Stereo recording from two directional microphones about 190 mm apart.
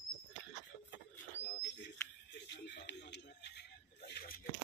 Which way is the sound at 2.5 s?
65° left (ahead or behind).